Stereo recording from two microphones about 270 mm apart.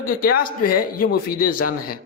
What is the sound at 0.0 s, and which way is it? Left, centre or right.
A man's voice, left.